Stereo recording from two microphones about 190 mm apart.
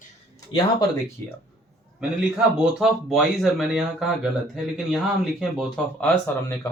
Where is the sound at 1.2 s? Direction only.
10° left (ahead or behind).